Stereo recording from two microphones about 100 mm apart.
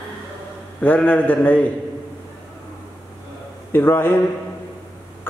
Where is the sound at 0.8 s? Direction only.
15° left (ahead or behind).